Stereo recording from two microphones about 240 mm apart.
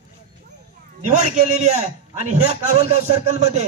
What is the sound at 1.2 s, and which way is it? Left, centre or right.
Speech, right.